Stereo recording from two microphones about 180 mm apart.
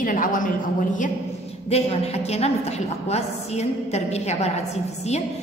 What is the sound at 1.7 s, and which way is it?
A woman's voice, 35° left (ahead or behind).